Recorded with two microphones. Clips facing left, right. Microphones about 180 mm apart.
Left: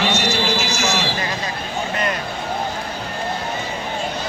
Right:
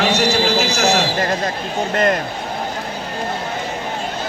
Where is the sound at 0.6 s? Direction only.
65° right (ahead or behind).